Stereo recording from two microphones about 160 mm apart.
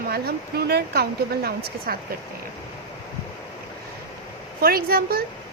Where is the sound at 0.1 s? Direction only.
75° right (ahead or behind).